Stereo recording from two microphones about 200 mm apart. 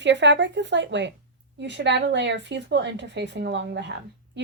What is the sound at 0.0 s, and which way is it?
A woman's voice, 60° right (ahead or behind).